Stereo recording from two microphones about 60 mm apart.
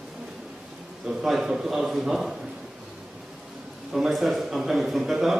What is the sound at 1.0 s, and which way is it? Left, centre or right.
A man's voice, centre.